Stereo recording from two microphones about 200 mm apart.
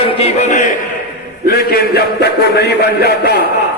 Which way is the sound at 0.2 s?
35° left (ahead or behind).